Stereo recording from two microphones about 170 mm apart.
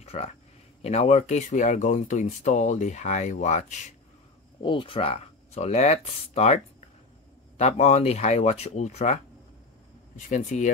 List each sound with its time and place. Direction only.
0.0 s a sound: 35° left (ahead or behind)
0.8 s speech: 40° left (ahead or behind)
4.6 s speech: 30° left (ahead or behind); by 10.7 s 45° left (ahead or behind)